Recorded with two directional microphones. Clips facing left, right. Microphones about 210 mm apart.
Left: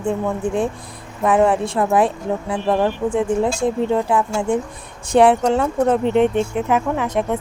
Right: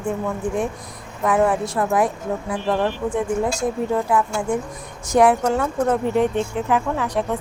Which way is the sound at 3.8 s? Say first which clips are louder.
Left 2 dB; 25° left (ahead or behind).